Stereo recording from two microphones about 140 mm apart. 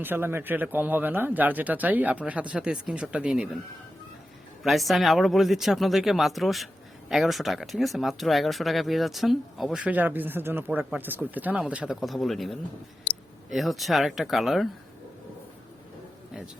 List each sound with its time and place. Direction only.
0.0 s a man's voice: 15° right (ahead or behind)
4.6 s a man's voice: centre (ahead or behind)